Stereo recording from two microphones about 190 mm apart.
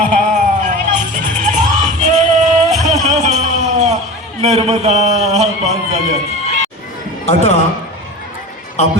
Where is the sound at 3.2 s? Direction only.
40° right (ahead or behind).